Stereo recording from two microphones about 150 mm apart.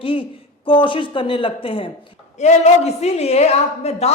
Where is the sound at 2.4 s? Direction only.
50° left (ahead or behind).